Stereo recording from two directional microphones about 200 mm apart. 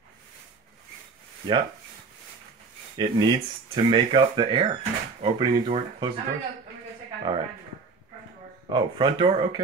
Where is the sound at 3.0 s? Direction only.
25° right (ahead or behind).